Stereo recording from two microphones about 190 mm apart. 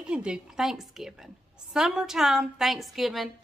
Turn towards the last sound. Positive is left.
turn(degrees=0)  # may be behind; listen again after turning